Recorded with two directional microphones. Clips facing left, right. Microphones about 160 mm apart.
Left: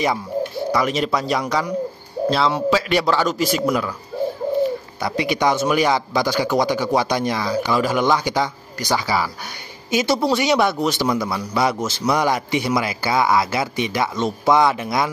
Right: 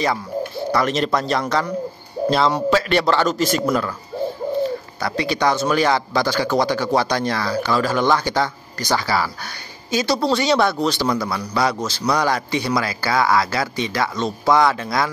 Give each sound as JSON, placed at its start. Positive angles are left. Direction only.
{"t": 0.7, "sound": "a man's voice", "side_deg": 10}